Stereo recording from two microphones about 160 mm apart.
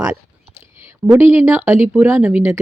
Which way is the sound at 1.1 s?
15° right (ahead or behind).